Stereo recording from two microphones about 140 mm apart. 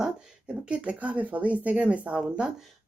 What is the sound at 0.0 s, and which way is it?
Speech, 5° right (ahead or behind).